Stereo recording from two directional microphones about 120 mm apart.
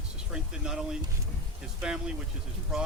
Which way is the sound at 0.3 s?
5° right (ahead or behind).